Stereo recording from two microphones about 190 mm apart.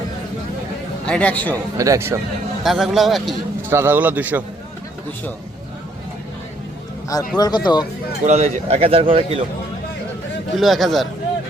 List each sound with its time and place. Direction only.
1.0 s speech: 5° left (ahead or behind)
1.8 s a man's voice: 15° right (ahead or behind)
2.6 s speech: centre (ahead or behind)
3.7 s a man's voice: 10° right (ahead or behind)
7.3 s speech: 20° left (ahead or behind)
8.2 s speech: 35° right (ahead or behind)
10.5 s speech: centre (ahead or behind)